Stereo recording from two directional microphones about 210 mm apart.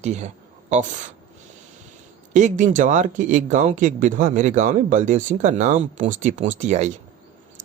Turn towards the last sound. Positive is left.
turn(degrees=-35)  # may be behind; listen again after turning